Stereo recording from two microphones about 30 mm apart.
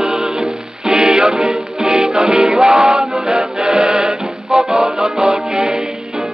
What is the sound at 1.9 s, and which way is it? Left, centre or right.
Music, right.